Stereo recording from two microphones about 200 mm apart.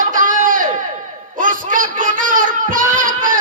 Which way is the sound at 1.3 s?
40° right (ahead or behind).